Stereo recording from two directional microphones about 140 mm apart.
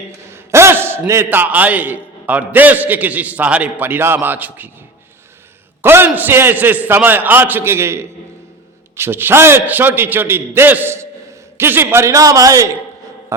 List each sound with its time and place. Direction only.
0.3 s a man's voice: 20° right (ahead or behind)
5.8 s a man's voice: 15° right (ahead or behind)